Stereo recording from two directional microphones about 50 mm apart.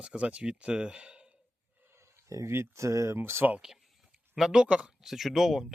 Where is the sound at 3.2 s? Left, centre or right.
Right.